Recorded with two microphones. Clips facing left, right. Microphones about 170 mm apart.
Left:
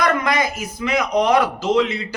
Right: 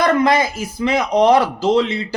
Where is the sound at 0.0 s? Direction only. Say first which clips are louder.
Right 4 dB; 30° right (ahead or behind).